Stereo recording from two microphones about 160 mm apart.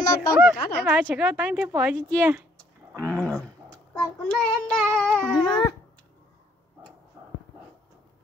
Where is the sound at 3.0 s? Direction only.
5° left (ahead or behind).